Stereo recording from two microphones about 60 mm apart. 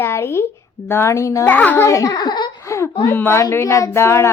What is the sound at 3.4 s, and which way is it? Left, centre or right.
Speech, left.